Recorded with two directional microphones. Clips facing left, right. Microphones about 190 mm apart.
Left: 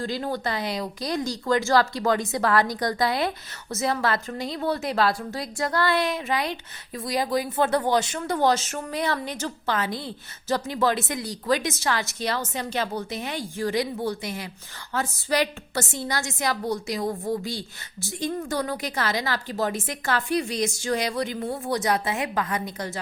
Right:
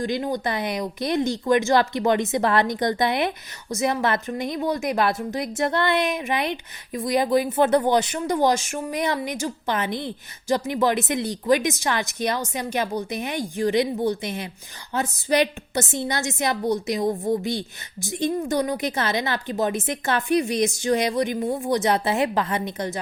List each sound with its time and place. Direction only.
0.0 s speech: 15° right (ahead or behind)